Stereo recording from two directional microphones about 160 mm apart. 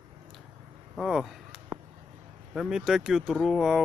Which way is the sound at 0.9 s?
Centre (ahead or behind).